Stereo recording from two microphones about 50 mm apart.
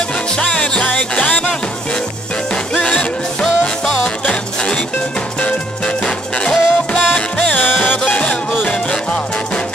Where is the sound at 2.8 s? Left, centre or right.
Left.